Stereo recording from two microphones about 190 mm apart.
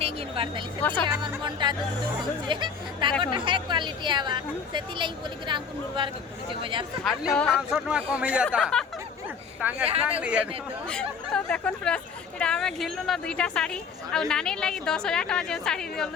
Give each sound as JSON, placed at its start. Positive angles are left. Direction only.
{"t": 0.0, "sound": "a sound", "side_deg": -30}
{"t": 0.8, "sound": "a woman's voice", "side_deg": 10}
{"t": 1.5, "sound": "speech", "side_deg": -25}
{"t": 7.0, "sound": "a woman's voice", "side_deg": 0}
{"t": 10.8, "sound": "a woman's voice", "side_deg": 5}